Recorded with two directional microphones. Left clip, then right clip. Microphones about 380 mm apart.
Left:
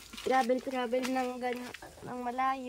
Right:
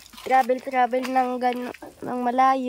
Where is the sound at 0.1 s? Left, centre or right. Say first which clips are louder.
Right 8 dB; centre.